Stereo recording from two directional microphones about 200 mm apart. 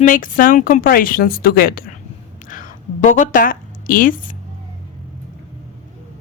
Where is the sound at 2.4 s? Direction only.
40° left (ahead or behind).